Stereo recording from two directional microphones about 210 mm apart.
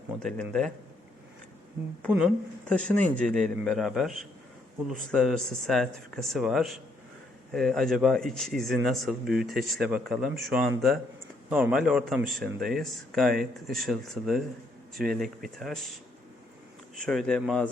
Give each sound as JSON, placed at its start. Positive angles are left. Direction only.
{"t": 0.2, "sound": "speech", "side_deg": 5}
{"t": 2.0, "sound": "speech", "side_deg": 0}
{"t": 2.8, "sound": "speech", "side_deg": -35}
{"t": 3.6, "sound": "speech", "side_deg": 0}
{"t": 5.1, "sound": "speech", "side_deg": 0}
{"t": 17.1, "sound": "speech", "side_deg": 5}